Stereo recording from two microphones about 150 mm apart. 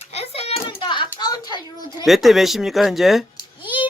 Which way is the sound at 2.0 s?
Centre (ahead or behind).